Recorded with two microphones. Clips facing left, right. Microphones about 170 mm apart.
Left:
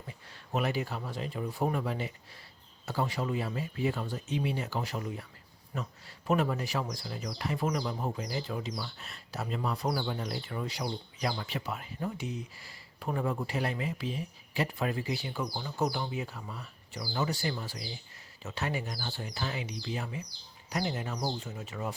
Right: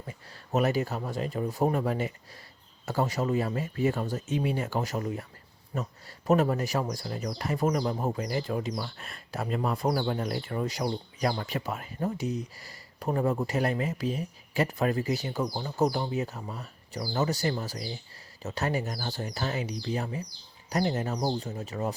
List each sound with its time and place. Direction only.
0.1 s speech: 45° right (ahead or behind)